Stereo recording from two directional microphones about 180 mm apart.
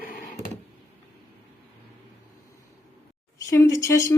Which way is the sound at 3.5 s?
20° left (ahead or behind).